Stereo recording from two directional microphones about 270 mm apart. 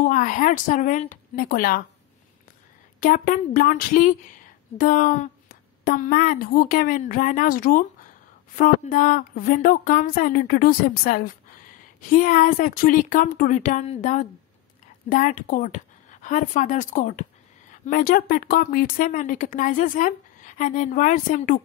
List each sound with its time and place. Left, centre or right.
0.0 s speech: left
3.0 s a woman's voice: left